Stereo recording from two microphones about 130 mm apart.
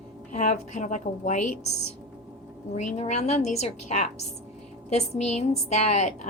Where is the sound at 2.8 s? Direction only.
60° left (ahead or behind).